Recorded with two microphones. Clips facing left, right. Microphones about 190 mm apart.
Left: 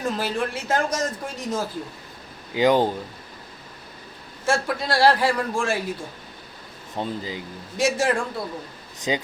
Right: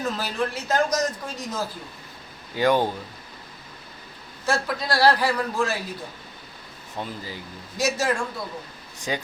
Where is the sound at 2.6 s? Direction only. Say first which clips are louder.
Left 2 dB; 15° left (ahead or behind).